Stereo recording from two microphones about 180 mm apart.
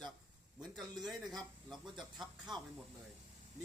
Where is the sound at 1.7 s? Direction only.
Centre (ahead or behind).